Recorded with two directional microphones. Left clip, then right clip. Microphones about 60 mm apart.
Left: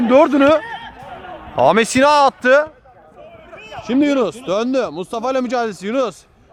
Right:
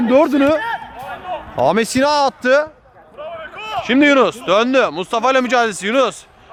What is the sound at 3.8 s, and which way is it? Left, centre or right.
Speech, right.